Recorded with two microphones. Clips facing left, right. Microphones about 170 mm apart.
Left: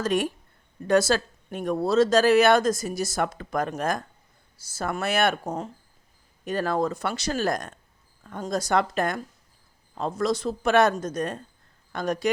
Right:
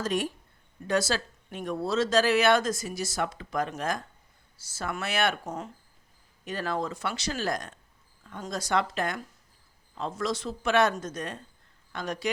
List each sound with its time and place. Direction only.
0.0 s speech: 60° left (ahead or behind)
6.4 s speech: 45° left (ahead or behind)